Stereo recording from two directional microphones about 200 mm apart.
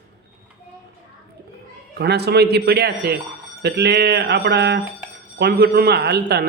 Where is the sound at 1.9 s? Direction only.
55° right (ahead or behind).